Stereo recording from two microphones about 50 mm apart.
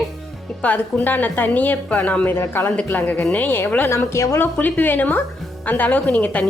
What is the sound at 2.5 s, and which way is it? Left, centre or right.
A woman's voice, left.